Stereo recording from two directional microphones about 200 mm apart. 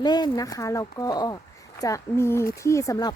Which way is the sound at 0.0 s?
20° left (ahead or behind).